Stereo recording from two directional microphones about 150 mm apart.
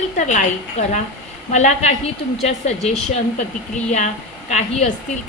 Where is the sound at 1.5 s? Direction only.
50° left (ahead or behind).